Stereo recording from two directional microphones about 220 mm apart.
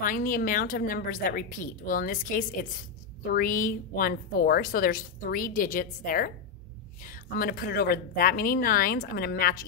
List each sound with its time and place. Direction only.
0.0 s a woman's voice: 40° left (ahead or behind)